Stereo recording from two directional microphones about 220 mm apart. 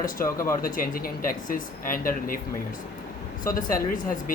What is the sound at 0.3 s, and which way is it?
Speech, 15° left (ahead or behind).